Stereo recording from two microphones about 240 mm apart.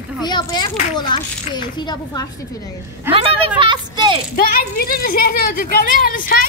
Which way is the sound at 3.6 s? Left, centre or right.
Centre.